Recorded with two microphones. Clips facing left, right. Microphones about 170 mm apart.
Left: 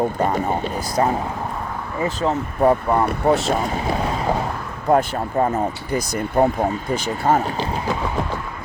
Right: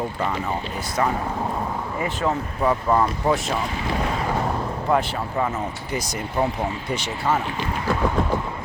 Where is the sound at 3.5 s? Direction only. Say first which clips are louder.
Left 5 dB; 45° left (ahead or behind).